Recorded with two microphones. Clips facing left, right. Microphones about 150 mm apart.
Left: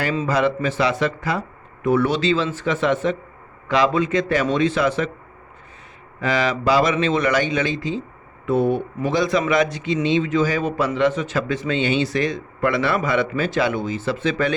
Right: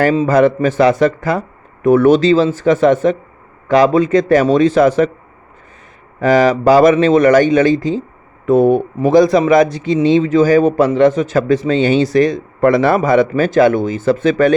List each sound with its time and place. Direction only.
0.3 s a man's voice: 50° right (ahead or behind)
6.1 s a man's voice: 45° right (ahead or behind)